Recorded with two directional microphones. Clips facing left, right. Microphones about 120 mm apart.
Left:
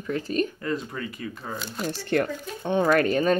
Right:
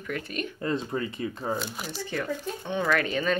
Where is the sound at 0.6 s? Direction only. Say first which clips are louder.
Right 1 dB; 30° right (ahead or behind).